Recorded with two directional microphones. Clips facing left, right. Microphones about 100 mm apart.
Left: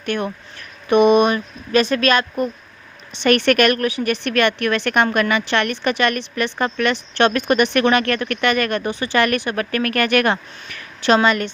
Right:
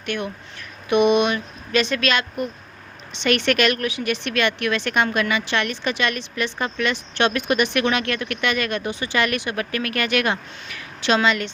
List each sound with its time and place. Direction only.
0.0 s speech: 45° left (ahead or behind)
3.2 s speech: 50° left (ahead or behind)